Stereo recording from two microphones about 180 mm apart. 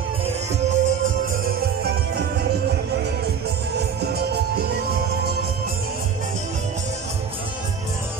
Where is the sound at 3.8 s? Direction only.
65° right (ahead or behind).